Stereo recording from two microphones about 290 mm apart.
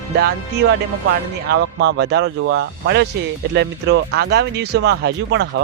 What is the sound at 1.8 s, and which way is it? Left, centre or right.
Speech, right.